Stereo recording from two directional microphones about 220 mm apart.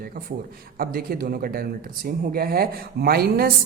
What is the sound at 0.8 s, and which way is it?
A woman's voice, 45° right (ahead or behind).